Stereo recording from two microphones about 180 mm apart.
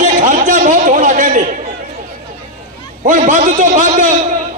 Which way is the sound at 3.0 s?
45° right (ahead or behind).